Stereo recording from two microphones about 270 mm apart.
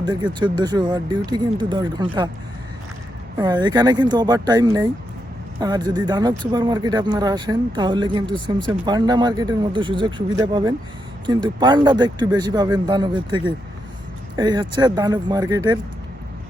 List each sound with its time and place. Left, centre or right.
0.0 s speech: centre
3.3 s speech: centre